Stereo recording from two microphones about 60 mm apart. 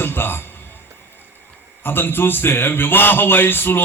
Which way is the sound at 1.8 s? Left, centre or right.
Left.